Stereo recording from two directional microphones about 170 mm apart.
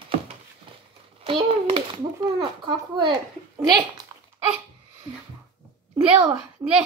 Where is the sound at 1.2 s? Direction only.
30° right (ahead or behind).